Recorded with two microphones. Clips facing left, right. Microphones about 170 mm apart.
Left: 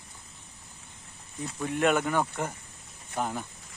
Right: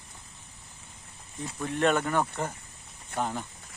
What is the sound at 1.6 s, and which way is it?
Speech, 10° left (ahead or behind).